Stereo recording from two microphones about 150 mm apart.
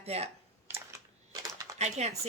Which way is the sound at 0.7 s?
20° right (ahead or behind).